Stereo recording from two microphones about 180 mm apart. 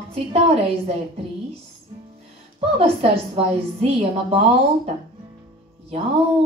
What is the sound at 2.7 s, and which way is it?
A woman's voice, 30° right (ahead or behind).